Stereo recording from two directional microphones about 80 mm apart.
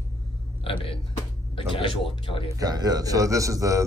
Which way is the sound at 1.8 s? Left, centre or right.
Left.